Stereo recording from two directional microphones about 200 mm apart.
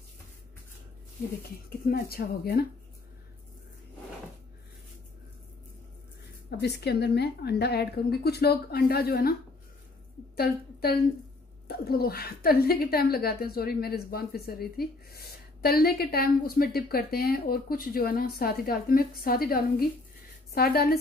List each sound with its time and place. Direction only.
1.9 s a woman's voice: 50° left (ahead or behind)
6.5 s a woman's voice: 55° left (ahead or behind)
10.3 s a woman's voice: 50° left (ahead or behind)